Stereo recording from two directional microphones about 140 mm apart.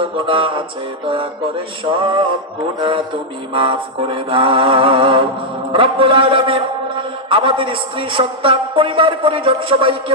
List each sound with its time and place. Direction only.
0.0 s a man's voice: 40° right (ahead or behind)